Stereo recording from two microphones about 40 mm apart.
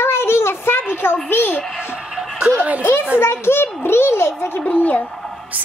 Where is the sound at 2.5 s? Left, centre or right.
Right.